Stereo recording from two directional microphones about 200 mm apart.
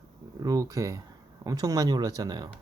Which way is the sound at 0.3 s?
20° right (ahead or behind).